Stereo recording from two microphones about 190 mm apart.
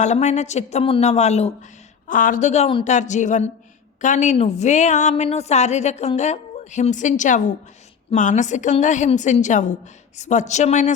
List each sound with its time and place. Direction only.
0.0 s a woman's voice: 35° left (ahead or behind)